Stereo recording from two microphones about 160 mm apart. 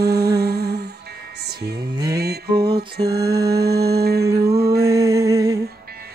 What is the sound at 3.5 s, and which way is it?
Music, 80° right.